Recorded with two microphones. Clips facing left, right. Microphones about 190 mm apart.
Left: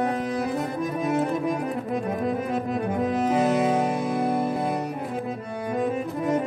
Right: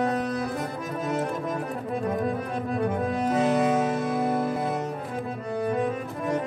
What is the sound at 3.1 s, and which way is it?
Music, 5° left (ahead or behind).